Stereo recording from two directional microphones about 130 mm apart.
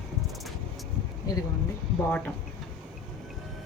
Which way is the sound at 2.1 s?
10° left (ahead or behind).